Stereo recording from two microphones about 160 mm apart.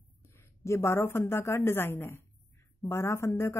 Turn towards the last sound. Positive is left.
turn(degrees=15)  # may be behind; listen again after turning